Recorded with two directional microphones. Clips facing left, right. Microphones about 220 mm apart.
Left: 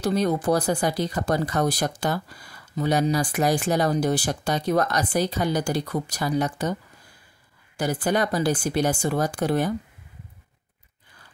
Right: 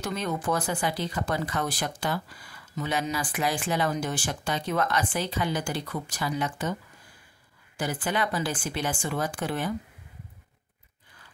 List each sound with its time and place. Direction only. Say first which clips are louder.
0.0 s speech: left 8 dB; 35° left (ahead or behind)